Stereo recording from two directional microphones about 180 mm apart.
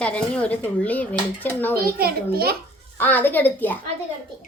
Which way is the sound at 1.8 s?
55° right (ahead or behind).